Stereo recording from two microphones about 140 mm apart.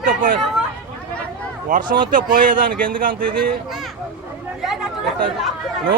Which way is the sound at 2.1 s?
80° right.